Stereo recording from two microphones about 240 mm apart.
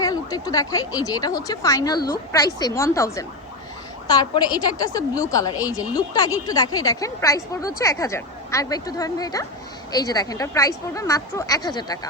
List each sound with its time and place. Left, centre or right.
0.0 s a woman's voice: centre